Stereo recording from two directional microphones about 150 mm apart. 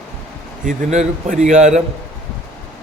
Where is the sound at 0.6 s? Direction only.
50° right (ahead or behind).